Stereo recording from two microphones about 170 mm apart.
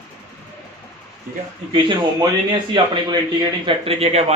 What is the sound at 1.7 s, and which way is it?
A man's voice, 30° right (ahead or behind).